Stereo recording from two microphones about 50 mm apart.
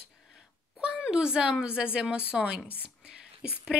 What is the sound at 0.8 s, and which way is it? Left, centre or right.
A woman's voice, centre.